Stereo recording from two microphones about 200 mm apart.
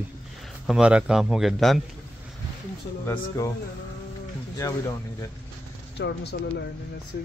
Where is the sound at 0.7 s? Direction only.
5° right (ahead or behind).